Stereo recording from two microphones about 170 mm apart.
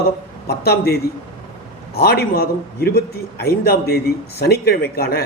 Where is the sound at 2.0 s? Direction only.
70° left (ahead or behind).